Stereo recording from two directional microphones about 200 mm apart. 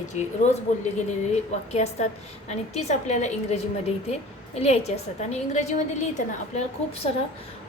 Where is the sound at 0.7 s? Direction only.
35° left (ahead or behind).